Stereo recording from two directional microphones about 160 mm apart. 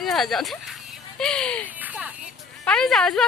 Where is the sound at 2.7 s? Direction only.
5° left (ahead or behind).